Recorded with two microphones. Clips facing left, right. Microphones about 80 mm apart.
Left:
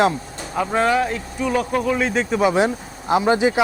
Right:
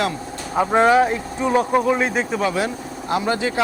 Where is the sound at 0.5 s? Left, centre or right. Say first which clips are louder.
Right 4 dB; right.